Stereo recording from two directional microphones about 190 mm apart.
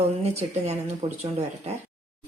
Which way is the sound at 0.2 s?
35° right (ahead or behind).